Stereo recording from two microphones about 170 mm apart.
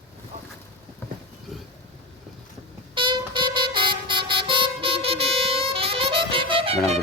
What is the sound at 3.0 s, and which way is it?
Music, 30° right (ahead or behind).